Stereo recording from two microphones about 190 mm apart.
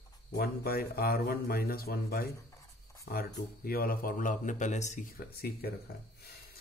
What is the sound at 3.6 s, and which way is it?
Speech, 50° left (ahead or behind).